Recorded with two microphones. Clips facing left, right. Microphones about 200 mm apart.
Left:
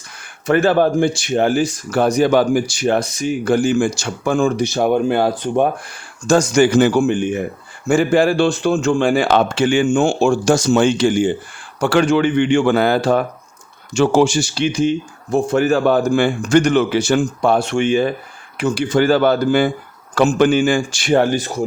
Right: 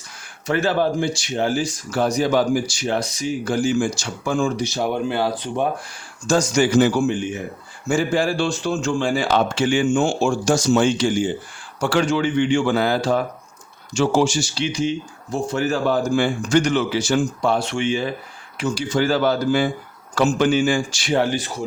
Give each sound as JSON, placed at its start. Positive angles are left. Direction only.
{"t": 0.4, "sound": "speech", "side_deg": 55}